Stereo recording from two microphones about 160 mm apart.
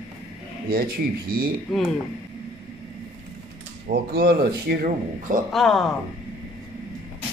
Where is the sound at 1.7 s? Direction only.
Centre (ahead or behind).